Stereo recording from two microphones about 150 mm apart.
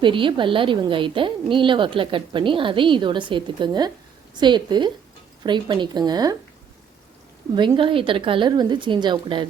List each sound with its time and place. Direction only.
0.0 s a woman's voice: 35° right (ahead or behind)
7.5 s a woman's voice: 30° right (ahead or behind)